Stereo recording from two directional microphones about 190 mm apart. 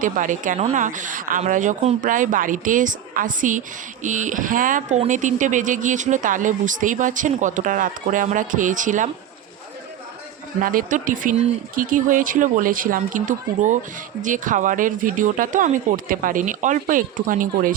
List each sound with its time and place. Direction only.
0.0 s speech: 45° right (ahead or behind)
10.6 s speech: 45° right (ahead or behind)